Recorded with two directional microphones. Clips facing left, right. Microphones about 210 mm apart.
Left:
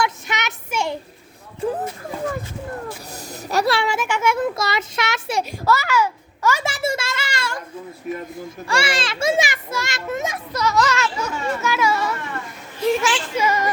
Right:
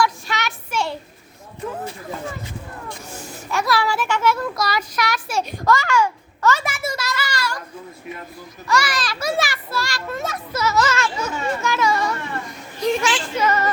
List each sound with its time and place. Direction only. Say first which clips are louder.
0.0 s a sound: right 2 dB; 20° left (ahead or behind)
3.1 s a child's voice: left 1 dB; 40° left (ahead or behind)
5.4 s a child's voice: right 1 dB; 5° left (ahead or behind)
6.7 s a sound: left 3 dB; 30° left (ahead or behind)
8.6 s a child's voice: right 1 dB; 30° left (ahead or behind)
10.5 s speech: even; 5° right (ahead or behind)